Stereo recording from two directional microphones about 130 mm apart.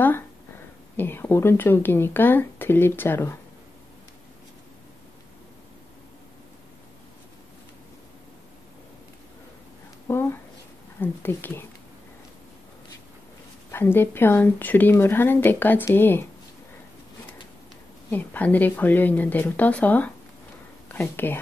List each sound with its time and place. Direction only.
0.9 s speech: 15° left (ahead or behind)
10.0 s a sound: 20° left (ahead or behind)
11.0 s speech: 15° left (ahead or behind)
13.7 s speech: 15° left (ahead or behind)
18.1 s speech: 15° left (ahead or behind)